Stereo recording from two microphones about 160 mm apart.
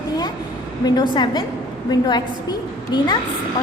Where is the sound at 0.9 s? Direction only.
25° left (ahead or behind).